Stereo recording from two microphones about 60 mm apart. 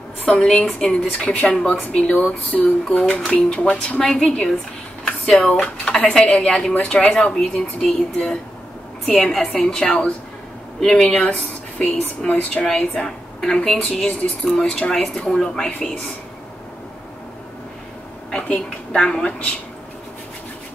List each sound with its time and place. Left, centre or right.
0.2 s speech: left
4.0 s a woman's voice: centre
5.0 s a sound: centre
5.6 s a woman's voice: centre
18.3 s a woman's voice: centre